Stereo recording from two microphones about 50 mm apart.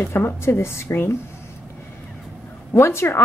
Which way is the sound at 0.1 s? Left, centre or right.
Left.